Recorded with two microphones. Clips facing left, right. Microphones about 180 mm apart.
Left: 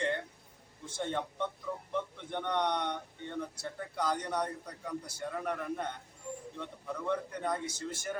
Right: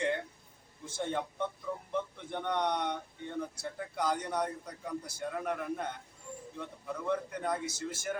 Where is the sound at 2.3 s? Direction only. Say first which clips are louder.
Even; 10° right (ahead or behind).